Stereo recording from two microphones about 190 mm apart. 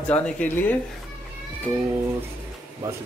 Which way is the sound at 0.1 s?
10° left (ahead or behind).